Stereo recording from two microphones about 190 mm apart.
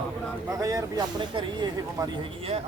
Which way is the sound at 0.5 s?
20° right (ahead or behind).